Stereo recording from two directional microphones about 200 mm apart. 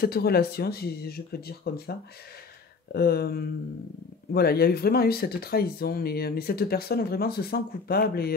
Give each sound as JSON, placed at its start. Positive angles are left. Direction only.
{"t": 0.0, "sound": "speech", "side_deg": 50}